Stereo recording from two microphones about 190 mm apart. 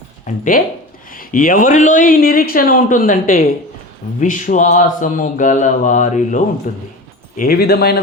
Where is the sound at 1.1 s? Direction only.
45° left (ahead or behind).